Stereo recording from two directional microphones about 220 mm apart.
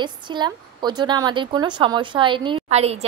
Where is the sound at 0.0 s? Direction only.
20° right (ahead or behind).